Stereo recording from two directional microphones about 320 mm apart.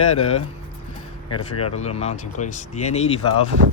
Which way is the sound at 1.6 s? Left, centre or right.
Centre.